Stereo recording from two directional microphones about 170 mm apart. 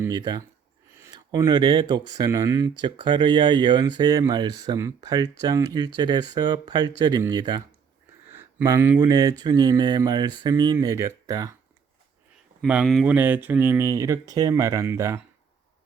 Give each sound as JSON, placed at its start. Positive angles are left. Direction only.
{"t": 0.0, "sound": "speech", "side_deg": -25}
{"t": 8.3, "sound": "a sound", "side_deg": -15}
{"t": 9.0, "sound": "speech", "side_deg": -25}
{"t": 12.6, "sound": "speech", "side_deg": -5}
{"t": 13.1, "sound": "speech", "side_deg": -10}